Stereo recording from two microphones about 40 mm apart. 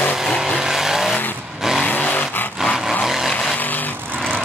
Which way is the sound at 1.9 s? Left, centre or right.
Left.